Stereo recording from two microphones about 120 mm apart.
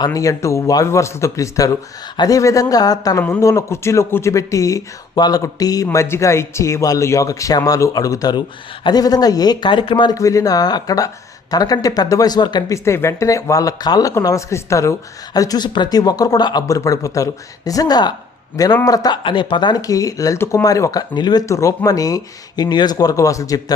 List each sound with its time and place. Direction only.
0.0 s speech: 25° left (ahead or behind)
10.2 s speech: 30° left (ahead or behind)
12.7 s speech: 25° left (ahead or behind)